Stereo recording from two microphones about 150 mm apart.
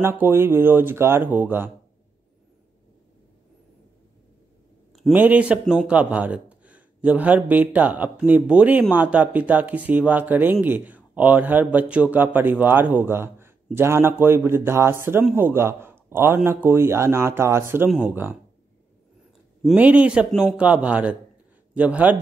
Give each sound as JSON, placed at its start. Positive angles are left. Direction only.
{"t": 0.0, "sound": "speech", "side_deg": -15}
{"t": 5.1, "sound": "speech", "side_deg": -10}
{"t": 19.6, "sound": "speech", "side_deg": -10}